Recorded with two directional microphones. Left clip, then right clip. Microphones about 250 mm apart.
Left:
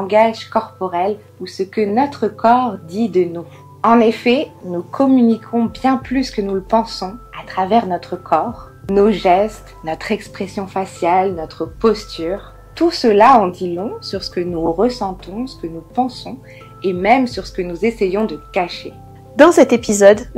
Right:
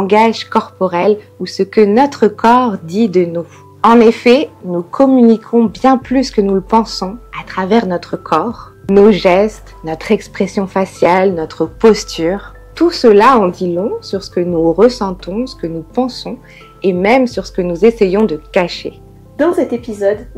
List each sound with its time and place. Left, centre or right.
0.0 s speech: right
10.3 s speech: right
11.4 s speech: right
12.7 s speech: right
14.9 s speech: right
16.8 s speech: right